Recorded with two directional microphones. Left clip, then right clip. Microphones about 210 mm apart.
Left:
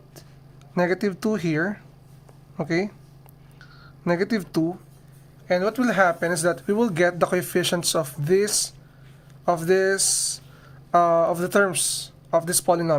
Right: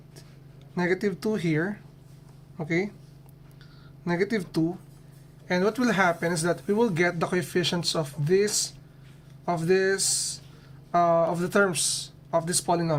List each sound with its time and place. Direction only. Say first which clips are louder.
0.7 s speech: left 4 dB; 25° left (ahead or behind)
4.0 s speech: left 3 dB; 25° left (ahead or behind)
5.5 s speech: left 3 dB; 15° left (ahead or behind)